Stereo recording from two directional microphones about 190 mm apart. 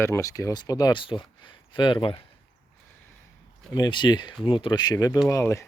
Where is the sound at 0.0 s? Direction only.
15° left (ahead or behind).